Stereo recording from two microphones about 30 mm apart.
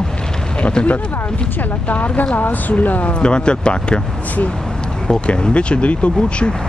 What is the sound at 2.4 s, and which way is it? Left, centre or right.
Speech, left.